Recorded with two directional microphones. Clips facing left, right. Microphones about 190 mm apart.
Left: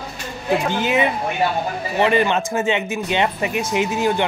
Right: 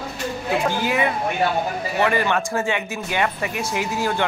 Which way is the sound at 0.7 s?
20° left (ahead or behind).